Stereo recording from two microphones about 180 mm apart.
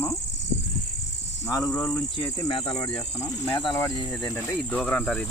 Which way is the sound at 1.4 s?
15° left (ahead or behind).